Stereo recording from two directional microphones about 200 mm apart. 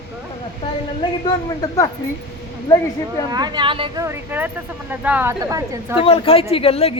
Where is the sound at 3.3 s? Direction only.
20° right (ahead or behind).